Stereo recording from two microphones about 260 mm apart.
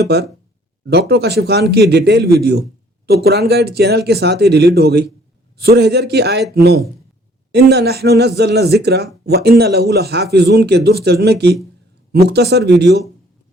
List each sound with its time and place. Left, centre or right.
0.1 s a man's voice: right